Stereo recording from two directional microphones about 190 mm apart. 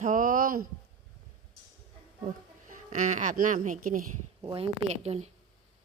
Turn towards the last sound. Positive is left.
turn(degrees=-35)  # may be behind; listen again after turning